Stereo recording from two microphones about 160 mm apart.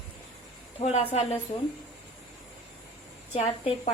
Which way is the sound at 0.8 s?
40° left (ahead or behind).